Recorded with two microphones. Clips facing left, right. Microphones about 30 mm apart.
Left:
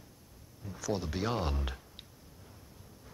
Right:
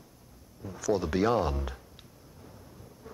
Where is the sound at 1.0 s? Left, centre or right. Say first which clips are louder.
Right 8 dB; centre.